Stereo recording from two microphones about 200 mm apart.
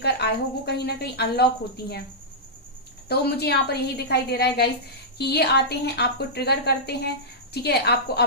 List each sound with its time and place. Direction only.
0.0 s a woman's voice: 55° left (ahead or behind)
3.1 s a woman's voice: 55° left (ahead or behind)